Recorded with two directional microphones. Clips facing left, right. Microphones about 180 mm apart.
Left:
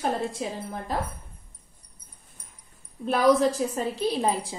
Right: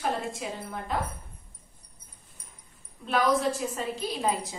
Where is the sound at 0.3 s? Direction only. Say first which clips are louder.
Left 3 dB; 35° left (ahead or behind).